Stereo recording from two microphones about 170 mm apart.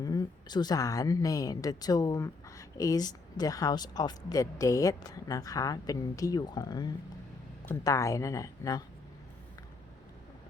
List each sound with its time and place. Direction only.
0.0 s a woman's voice: 20° left (ahead or behind)